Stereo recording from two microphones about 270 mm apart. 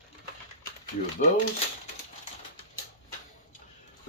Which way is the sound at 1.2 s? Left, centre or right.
Left.